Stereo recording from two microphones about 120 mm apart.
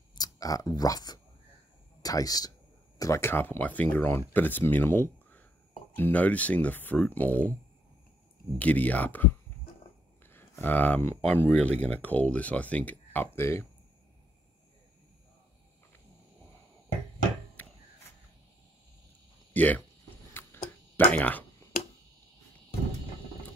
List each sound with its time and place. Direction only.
0.1 s speech: 30° left (ahead or behind); by 7.3 s 15° left (ahead or behind)
8.5 s speech: 10° left (ahead or behind)
10.6 s speech: 15° left (ahead or behind)
19.5 s speech: 15° left (ahead or behind)
20.3 s tick-tock: 15° left (ahead or behind)